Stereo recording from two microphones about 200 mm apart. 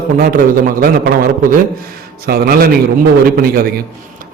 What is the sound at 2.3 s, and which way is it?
Speech, 50° right (ahead or behind).